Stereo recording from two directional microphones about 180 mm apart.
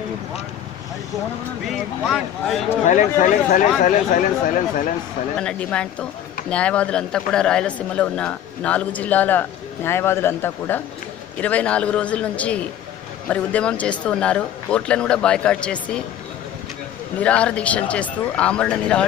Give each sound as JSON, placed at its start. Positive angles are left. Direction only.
{"t": 1.7, "sound": "speech", "side_deg": 0}
{"t": 2.8, "sound": "speech", "side_deg": 45}
{"t": 5.4, "sound": "a man's voice", "side_deg": 5}
{"t": 17.2, "sound": "a man's voice", "side_deg": 5}